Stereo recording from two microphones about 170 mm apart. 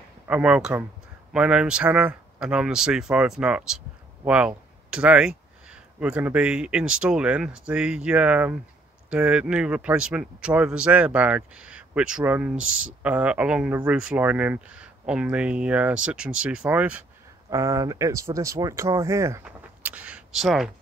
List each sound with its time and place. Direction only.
0.3 s a man's voice: 5° right (ahead or behind)
17.5 s a man's voice: 20° right (ahead or behind)
19.4 s a sound: 5° right (ahead or behind)